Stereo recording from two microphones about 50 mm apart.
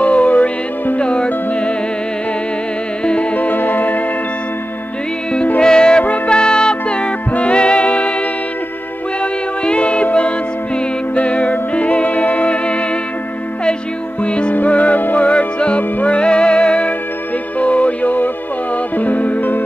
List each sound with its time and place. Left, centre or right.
0.0 s music: left
3.1 s music: left
5.6 s music: centre
9.2 s music: left
11.1 s music: left
14.2 s music: left
14.5 s music: left